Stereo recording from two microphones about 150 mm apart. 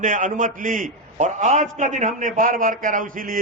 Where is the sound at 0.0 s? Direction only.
60° right (ahead or behind).